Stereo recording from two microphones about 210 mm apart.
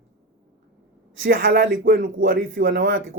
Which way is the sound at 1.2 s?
45° right (ahead or behind).